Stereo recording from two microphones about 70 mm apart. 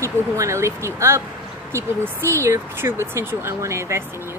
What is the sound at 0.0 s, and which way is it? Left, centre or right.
A woman's voice, right.